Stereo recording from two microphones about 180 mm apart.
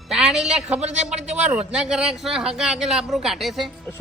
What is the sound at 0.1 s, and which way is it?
Speech, centre (ahead or behind).